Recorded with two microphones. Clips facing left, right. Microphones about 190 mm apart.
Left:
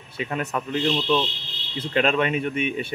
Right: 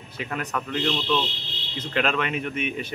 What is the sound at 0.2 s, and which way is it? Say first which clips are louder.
Speech: left 3 dB; 25° left (ahead or behind).